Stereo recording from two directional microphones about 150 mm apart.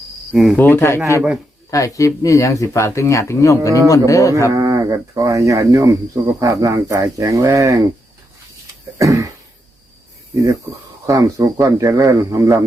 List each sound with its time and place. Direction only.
0.5 s speech: 15° left (ahead or behind)
4.5 s speech: 20° right (ahead or behind)
9.0 s speech: 20° right (ahead or behind)
11.0 s speech: 20° right (ahead or behind)